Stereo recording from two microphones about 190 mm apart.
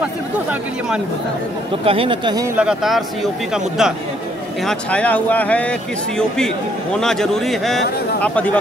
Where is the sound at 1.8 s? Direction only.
30° right (ahead or behind).